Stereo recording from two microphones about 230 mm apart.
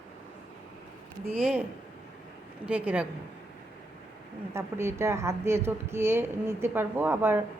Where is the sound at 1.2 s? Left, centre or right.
Centre.